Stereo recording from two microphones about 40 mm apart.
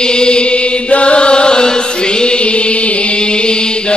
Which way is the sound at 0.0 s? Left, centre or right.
Left.